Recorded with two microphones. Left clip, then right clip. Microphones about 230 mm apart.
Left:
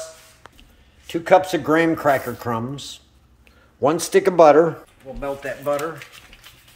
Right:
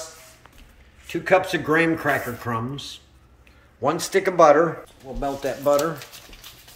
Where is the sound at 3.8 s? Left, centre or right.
Left.